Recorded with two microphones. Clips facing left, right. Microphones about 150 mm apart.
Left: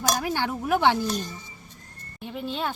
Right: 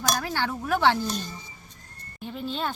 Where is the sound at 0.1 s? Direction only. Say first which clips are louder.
Left 1 dB; 15° left (ahead or behind).